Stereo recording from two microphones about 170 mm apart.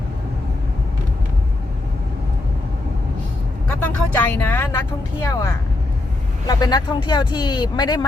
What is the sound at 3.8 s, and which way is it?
Vehicle, 10° left (ahead or behind).